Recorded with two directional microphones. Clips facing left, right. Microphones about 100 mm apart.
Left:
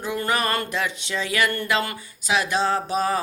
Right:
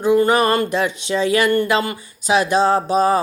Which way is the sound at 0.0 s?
25° right (ahead or behind).